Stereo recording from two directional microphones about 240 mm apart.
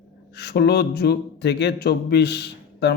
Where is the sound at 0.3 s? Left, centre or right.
Left.